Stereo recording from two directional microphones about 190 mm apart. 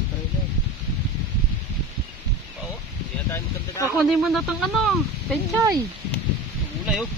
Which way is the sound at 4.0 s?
Centre (ahead or behind).